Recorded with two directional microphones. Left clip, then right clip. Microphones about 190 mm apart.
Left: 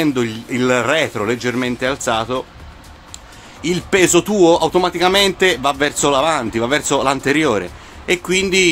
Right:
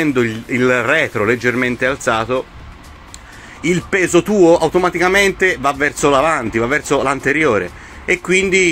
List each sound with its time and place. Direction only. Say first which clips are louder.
0.0 s speech: right 2 dB; 5° left (ahead or behind)
3.6 s speech: left 1 dB; 5° left (ahead or behind)
5.5 s speech: even; 20° left (ahead or behind)
5.9 s speech: right 2 dB; 10° left (ahead or behind)
7.5 s speech: right 3 dB; 10° left (ahead or behind)
8.4 s speech: right 1 dB; 25° left (ahead or behind)